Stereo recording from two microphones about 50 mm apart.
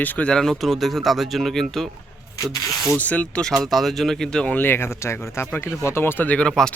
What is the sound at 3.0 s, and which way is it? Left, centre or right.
Speech, left.